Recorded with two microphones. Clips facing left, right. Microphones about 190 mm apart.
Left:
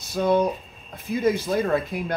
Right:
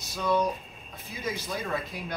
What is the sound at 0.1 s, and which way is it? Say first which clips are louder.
Speech: left 6 dB; 55° left (ahead or behind).